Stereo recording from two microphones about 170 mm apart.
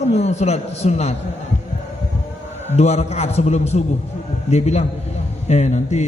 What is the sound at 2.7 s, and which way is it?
A man's voice, 40° left (ahead or behind).